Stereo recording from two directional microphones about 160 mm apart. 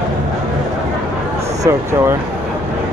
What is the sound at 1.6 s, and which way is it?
Speech, 15° right (ahead or behind).